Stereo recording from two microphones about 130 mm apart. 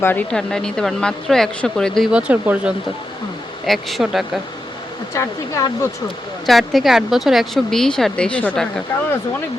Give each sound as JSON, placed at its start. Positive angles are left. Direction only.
{"t": 0.0, "sound": "speech", "side_deg": 15}
{"t": 2.1, "sound": "speech", "side_deg": -10}
{"t": 3.7, "sound": "speech", "side_deg": 0}
{"t": 5.1, "sound": "speech", "side_deg": 20}
{"t": 6.4, "sound": "speech", "side_deg": 0}